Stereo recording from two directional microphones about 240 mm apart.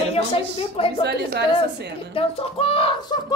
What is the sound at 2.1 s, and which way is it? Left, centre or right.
Speech, left.